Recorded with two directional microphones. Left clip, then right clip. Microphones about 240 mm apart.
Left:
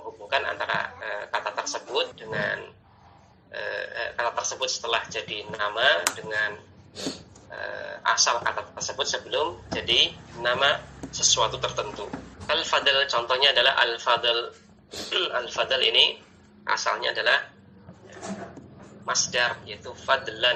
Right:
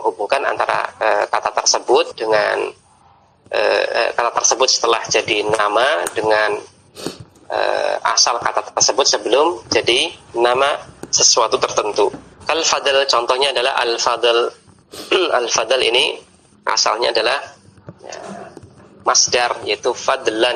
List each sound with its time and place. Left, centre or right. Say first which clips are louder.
0.3 s frog: right 6 dB; right
1.7 s speech: right 13 dB; right
7.5 s speech: right 17 dB; right
19.0 s speech: right 10 dB; right